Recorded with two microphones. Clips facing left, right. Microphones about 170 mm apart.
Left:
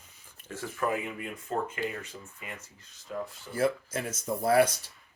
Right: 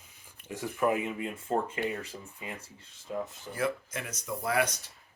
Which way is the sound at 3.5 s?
30° left (ahead or behind).